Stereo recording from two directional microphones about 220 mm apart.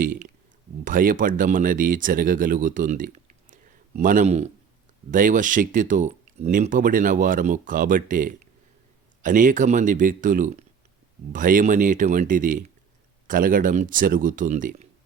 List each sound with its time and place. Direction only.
0.0 s speech: 40° right (ahead or behind)